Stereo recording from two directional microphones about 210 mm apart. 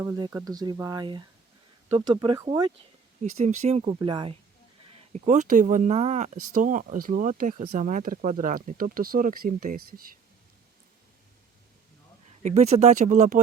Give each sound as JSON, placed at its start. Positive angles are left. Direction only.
{"t": 0.0, "sound": "speech", "side_deg": -10}
{"t": 3.2, "sound": "speech", "side_deg": -35}
{"t": 5.1, "sound": "speech", "side_deg": -35}
{"t": 12.4, "sound": "speech", "side_deg": -35}